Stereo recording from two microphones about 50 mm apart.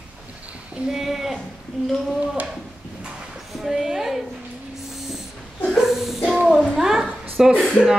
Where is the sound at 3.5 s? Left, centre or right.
Centre.